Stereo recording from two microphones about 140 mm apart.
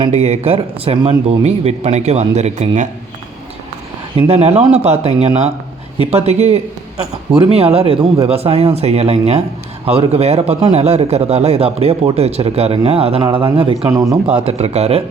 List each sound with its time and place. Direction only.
0.1 s a man's voice: 50° right (ahead or behind)
4.3 s a man's voice: 50° right (ahead or behind)
13.9 s speech: 25° right (ahead or behind)
14.4 s a man's voice: 50° right (ahead or behind)